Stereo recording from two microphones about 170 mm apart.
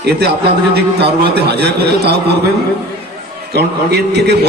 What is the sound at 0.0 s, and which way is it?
A man's voice, 70° right (ahead or behind).